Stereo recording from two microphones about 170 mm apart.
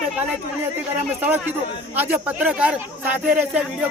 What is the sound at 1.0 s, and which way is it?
A man's voice, 10° right (ahead or behind).